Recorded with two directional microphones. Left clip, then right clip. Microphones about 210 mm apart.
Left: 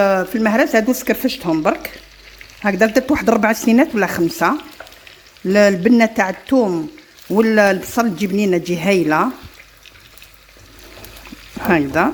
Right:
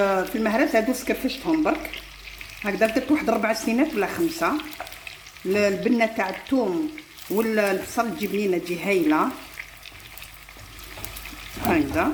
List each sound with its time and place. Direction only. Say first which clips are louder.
0.0 s speech: left 7 dB; 40° left (ahead or behind)
5.5 s speech: left 9 dB; 45° left (ahead or behind)
12.0 s speech: left 7 dB; 50° left (ahead or behind)